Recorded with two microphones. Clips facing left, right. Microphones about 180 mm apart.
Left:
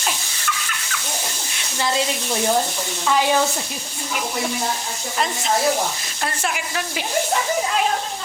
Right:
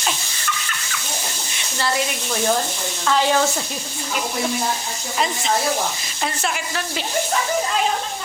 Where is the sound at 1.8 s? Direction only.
20° left (ahead or behind).